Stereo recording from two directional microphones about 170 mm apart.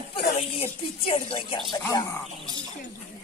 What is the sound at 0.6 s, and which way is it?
Speech, 35° left (ahead or behind).